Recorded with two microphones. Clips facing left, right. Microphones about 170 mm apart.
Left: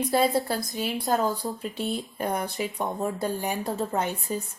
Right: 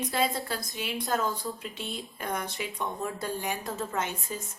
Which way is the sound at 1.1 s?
35° left (ahead or behind).